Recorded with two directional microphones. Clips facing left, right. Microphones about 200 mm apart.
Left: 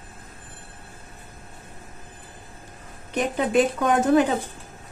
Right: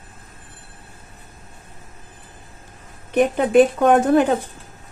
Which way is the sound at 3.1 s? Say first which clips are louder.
Right 7 dB; 55° right (ahead or behind).